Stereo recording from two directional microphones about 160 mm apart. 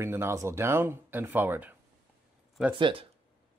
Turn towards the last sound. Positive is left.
turn(degrees=-35)  # may be behind; listen again after turning